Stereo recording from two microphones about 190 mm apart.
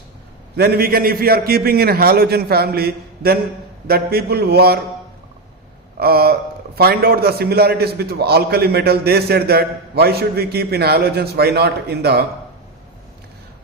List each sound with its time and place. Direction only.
0.5 s a man's voice: 55° right (ahead or behind)
6.0 s a man's voice: 55° right (ahead or behind)